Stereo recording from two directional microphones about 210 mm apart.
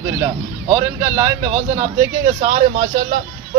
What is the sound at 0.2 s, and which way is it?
Speech, 15° right (ahead or behind).